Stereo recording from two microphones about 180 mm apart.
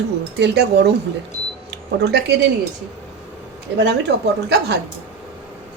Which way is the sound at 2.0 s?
65° right (ahead or behind).